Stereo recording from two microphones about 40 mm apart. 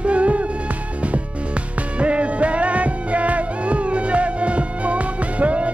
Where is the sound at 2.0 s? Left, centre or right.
Right.